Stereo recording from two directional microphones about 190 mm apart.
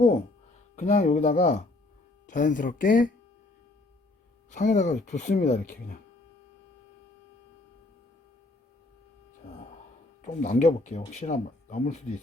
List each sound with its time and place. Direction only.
0.8 s speech: 40° left (ahead or behind)
4.5 s speech: 40° left (ahead or behind)
10.2 s speech: 40° left (ahead or behind)